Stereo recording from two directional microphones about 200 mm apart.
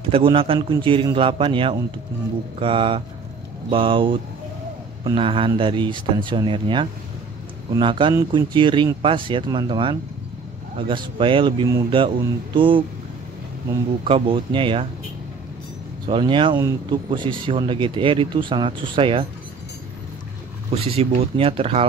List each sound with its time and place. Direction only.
0.1 s speech: 25° right (ahead or behind)
14.0 s speech: 30° right (ahead or behind)
16.1 s speech: 25° right (ahead or behind)
20.7 s speech: 30° right (ahead or behind)